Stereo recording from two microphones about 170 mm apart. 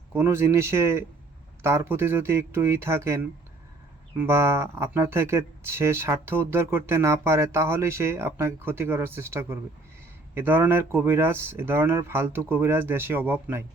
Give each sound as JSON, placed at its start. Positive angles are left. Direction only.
{"t": 0.1, "sound": "speech", "side_deg": -15}
{"t": 4.2, "sound": "speech", "side_deg": -15}